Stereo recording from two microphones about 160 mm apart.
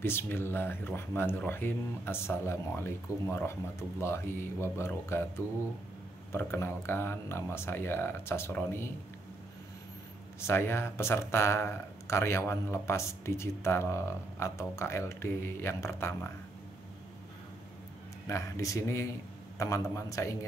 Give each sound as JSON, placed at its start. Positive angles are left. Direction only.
{"t": 0.0, "sound": "speech", "side_deg": 15}
{"t": 10.4, "sound": "speech", "side_deg": 15}
{"t": 18.2, "sound": "speech", "side_deg": 20}